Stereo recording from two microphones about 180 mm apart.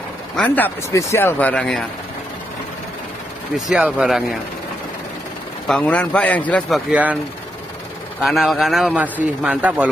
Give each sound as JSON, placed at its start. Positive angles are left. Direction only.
{"t": 0.4, "sound": "speech", "side_deg": 10}
{"t": 3.5, "sound": "a man's voice", "side_deg": -5}
{"t": 5.7, "sound": "speech", "side_deg": 5}
{"t": 6.9, "sound": "speech", "side_deg": -10}
{"t": 8.2, "sound": "a man's voice", "side_deg": 0}